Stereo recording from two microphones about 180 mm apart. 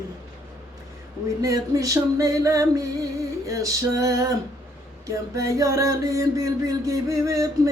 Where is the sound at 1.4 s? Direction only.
20° right (ahead or behind).